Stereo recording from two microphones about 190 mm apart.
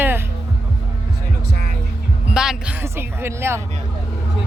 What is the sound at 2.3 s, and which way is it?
Music, 5° right (ahead or behind).